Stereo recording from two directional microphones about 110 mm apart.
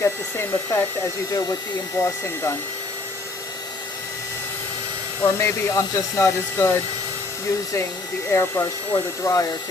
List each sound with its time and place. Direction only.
0.0 s speech: 20° left (ahead or behind)
5.2 s speech: 25° left (ahead or behind)
8.3 s speech: 20° left (ahead or behind)